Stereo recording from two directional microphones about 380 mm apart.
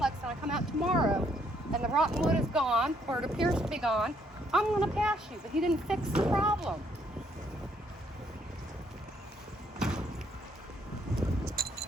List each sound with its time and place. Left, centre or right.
0.0 s vehicle: centre
1.7 s speech: centre
9.7 s door: centre
11.6 s a sound: right